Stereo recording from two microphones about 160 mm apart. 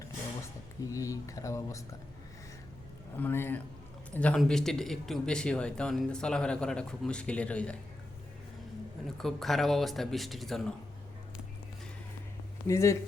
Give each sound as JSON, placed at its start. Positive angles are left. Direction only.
{"t": 0.9, "sound": "speech", "side_deg": 20}
{"t": 3.2, "sound": "a man's voice", "side_deg": 15}
{"t": 9.1, "sound": "speech", "side_deg": 0}
{"t": 12.6, "sound": "a man's voice", "side_deg": 15}